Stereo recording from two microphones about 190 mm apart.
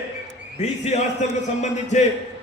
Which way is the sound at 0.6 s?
35° left (ahead or behind).